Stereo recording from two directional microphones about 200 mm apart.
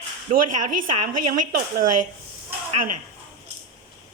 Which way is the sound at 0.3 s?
35° right (ahead or behind).